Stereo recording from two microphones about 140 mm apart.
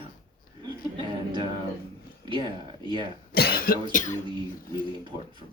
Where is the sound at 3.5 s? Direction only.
90° left.